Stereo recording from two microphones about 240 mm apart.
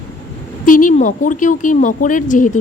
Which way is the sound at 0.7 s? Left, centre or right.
Left.